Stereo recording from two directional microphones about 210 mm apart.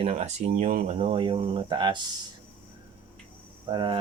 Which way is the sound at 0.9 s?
25° right (ahead or behind).